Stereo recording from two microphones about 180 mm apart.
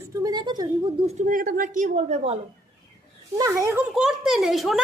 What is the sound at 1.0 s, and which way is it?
A woman's voice, 45° right (ahead or behind).